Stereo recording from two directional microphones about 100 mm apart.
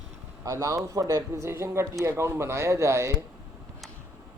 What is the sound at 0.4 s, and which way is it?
A man's voice, 30° right (ahead or behind).